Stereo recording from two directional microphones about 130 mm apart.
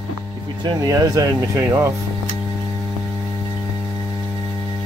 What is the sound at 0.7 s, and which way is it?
Speech, 30° right (ahead or behind).